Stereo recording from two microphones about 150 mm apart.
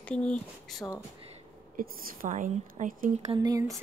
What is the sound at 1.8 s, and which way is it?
Speech, 75° right (ahead or behind).